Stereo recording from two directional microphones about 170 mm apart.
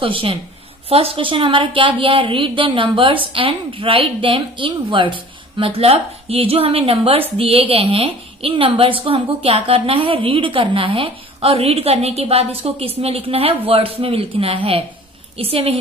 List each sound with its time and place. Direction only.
0.0 s a woman's voice: 30° right (ahead or behind)